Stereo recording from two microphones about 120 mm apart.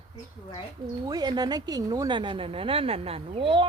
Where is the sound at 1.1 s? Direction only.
35° right (ahead or behind).